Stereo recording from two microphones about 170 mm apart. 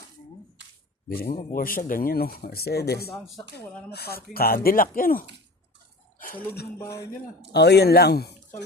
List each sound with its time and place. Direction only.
1.0 s speech: 65° left (ahead or behind)
3.2 s speech: centre (ahead or behind)
3.7 s speech: 10° left (ahead or behind)
3.9 s speech: 70° left (ahead or behind)
6.7 s speech: 15° left (ahead or behind)
7.5 s speech: 75° left (ahead or behind)